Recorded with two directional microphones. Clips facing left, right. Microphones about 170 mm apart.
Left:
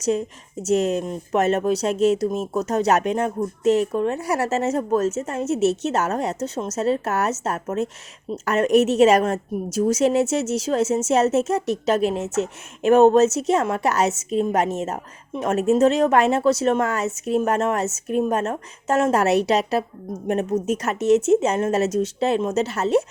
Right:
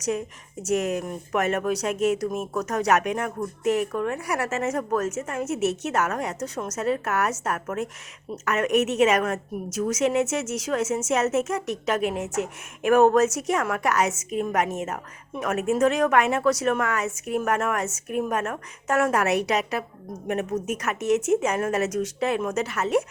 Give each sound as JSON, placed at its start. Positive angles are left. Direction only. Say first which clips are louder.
{"t": 0.0, "sound": "a woman's voice", "louder": "left 5 dB", "side_deg": 30}